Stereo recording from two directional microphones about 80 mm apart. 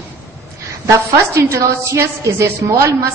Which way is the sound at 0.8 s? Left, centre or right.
Right.